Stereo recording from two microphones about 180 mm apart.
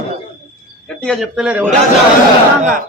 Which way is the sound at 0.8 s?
5° left (ahead or behind).